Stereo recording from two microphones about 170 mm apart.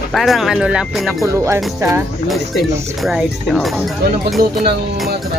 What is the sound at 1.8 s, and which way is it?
Speech, 20° right (ahead or behind).